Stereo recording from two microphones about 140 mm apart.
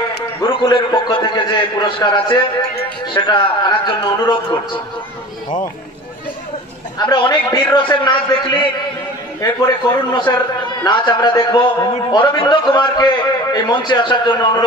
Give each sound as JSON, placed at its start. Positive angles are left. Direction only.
{"t": 0.4, "sound": "a man's voice", "side_deg": 35}
{"t": 7.0, "sound": "a man's voice", "side_deg": 35}
{"t": 10.1, "sound": "a man's voice", "side_deg": 35}